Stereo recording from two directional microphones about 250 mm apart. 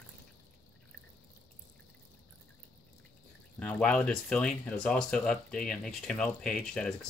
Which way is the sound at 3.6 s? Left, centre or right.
Centre.